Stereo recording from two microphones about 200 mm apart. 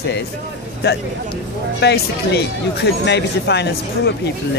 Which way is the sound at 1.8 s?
55° left (ahead or behind).